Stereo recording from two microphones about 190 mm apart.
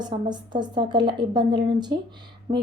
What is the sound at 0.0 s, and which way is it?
Speech, 25° right (ahead or behind).